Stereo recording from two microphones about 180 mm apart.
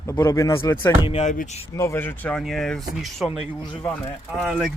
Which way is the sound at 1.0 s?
35° left (ahead or behind).